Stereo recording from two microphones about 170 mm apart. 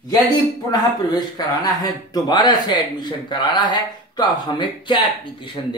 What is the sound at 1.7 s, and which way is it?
Speech, 20° left (ahead or behind).